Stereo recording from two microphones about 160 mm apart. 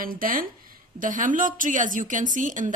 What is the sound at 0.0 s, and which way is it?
Speech, 60° right (ahead or behind).